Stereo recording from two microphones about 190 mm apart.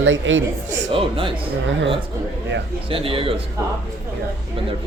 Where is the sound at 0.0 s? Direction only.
80° right.